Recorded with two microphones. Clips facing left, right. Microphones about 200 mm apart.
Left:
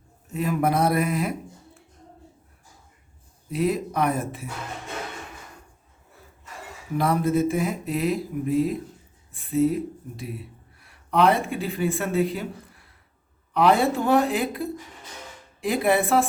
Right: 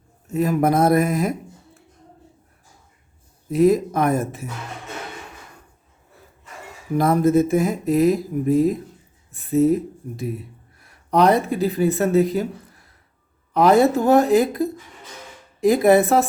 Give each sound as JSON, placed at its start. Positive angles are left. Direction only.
{"t": 0.3, "sound": "speech", "side_deg": -45}
{"t": 3.5, "sound": "speech", "side_deg": -45}
{"t": 6.9, "sound": "a woman's voice", "side_deg": -45}